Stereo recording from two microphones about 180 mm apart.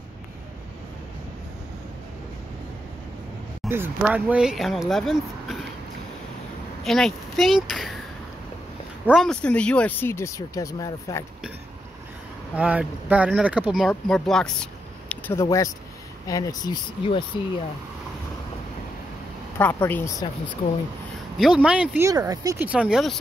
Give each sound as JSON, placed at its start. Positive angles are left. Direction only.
{"t": 3.6, "sound": "speech", "side_deg": -10}
{"t": 6.8, "sound": "speech", "side_deg": 0}
{"t": 9.0, "sound": "speech", "side_deg": 0}
{"t": 12.5, "sound": "speech", "side_deg": -10}
{"t": 16.3, "sound": "speech", "side_deg": 20}
{"t": 19.6, "sound": "speech", "side_deg": 10}
{"t": 21.4, "sound": "speech", "side_deg": -5}
{"t": 22.7, "sound": "speech", "side_deg": -5}